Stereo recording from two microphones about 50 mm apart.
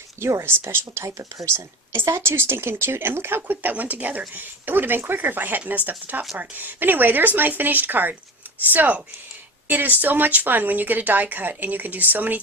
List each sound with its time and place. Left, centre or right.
0.2 s speech: right
1.5 s speech: right
3.4 s speech: right